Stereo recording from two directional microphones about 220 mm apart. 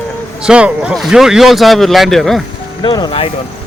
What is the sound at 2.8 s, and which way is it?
Speech, 20° left (ahead or behind).